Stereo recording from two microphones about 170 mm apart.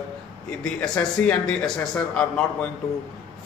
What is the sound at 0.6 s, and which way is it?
A man's voice, 5° left (ahead or behind).